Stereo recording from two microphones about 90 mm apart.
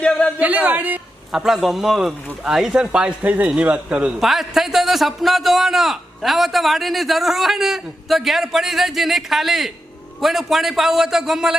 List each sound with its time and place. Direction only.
0.0 s speech: 10° left (ahead or behind)
0.3 s speech: 20° right (ahead or behind)
1.3 s speech: 5° right (ahead or behind)
4.2 s a man's voice: 5° right (ahead or behind)